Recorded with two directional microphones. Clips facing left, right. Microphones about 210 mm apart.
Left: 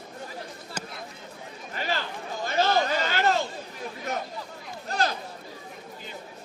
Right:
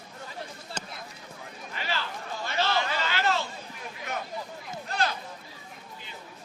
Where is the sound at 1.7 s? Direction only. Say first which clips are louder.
Left 3 dB; 45° left (ahead or behind).